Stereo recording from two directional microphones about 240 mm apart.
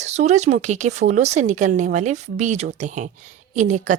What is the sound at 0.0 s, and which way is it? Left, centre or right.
A woman's voice, right.